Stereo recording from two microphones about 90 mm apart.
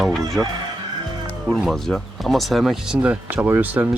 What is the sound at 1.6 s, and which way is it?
Speech, 5° left (ahead or behind).